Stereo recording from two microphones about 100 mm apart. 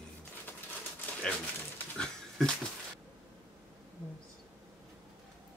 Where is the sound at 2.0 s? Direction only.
5° left (ahead or behind).